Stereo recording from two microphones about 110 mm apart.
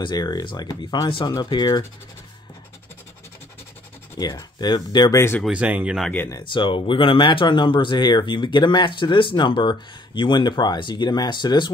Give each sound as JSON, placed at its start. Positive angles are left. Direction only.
{"t": 0.0, "sound": "speech", "side_deg": 40}
{"t": 4.2, "sound": "speech", "side_deg": 35}
{"t": 5.5, "sound": "speech", "side_deg": -10}
{"t": 6.4, "sound": "speech", "side_deg": 50}